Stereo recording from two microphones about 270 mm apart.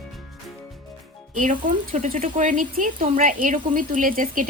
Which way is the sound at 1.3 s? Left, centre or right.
Right.